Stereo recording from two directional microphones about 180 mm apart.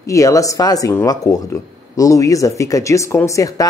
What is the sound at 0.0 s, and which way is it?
Speech, 20° left (ahead or behind).